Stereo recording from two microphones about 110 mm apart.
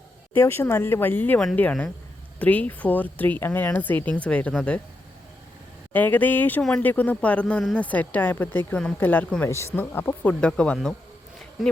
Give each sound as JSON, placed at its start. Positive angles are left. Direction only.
{"t": 0.3, "sound": "speech", "side_deg": 25}
{"t": 5.9, "sound": "speech", "side_deg": 15}
{"t": 10.4, "sound": "speech", "side_deg": 10}